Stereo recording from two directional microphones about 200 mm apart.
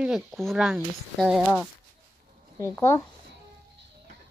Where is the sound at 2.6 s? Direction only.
15° left (ahead or behind).